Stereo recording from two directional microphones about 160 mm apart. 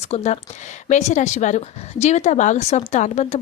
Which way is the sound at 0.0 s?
45° left (ahead or behind).